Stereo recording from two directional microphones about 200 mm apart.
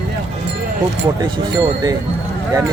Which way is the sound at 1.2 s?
20° right (ahead or behind).